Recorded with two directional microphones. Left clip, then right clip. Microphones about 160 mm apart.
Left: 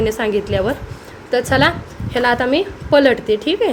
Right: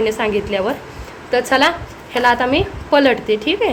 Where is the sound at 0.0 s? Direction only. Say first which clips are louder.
Even; 20° left (ahead or behind).